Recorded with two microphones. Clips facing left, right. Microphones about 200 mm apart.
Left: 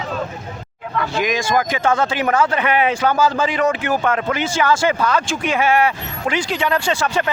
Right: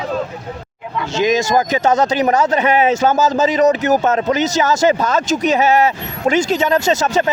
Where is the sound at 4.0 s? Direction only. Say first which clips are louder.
Right 4 dB; 20° right (ahead or behind).